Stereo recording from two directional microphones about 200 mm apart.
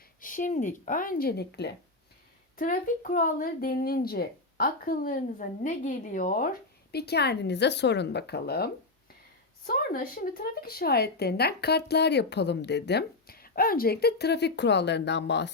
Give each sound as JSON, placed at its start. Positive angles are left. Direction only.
{"t": 0.2, "sound": "speech", "side_deg": 40}
{"t": 2.6, "sound": "a woman's voice", "side_deg": 40}